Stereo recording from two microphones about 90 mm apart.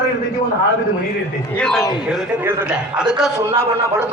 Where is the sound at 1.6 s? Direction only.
5° left (ahead or behind).